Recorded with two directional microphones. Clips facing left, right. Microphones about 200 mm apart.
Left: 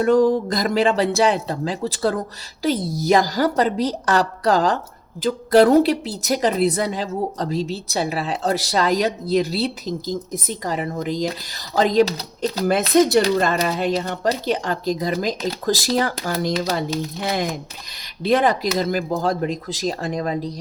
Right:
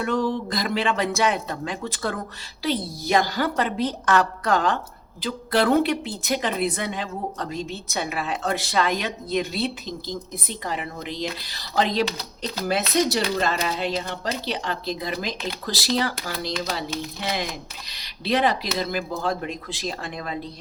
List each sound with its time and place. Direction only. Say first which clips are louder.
0.0 s a woman's voice: left 8 dB; 40° left (ahead or behind)